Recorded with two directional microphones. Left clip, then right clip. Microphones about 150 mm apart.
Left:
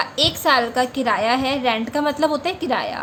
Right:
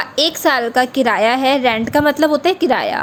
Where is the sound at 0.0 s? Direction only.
45° right (ahead or behind).